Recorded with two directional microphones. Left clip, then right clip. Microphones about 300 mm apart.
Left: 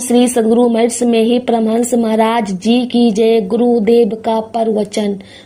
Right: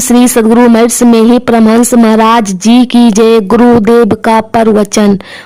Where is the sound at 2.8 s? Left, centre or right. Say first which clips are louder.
Right 6 dB; right.